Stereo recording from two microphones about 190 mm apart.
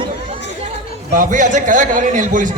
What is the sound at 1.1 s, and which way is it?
A man's voice, 45° right (ahead or behind).